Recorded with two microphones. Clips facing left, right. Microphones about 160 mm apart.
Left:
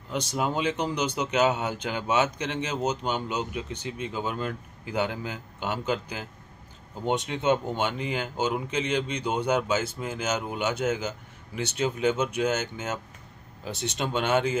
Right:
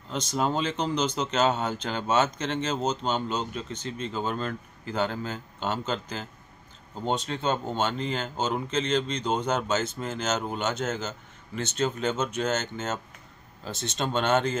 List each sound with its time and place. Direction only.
0.1 s speech: 10° left (ahead or behind)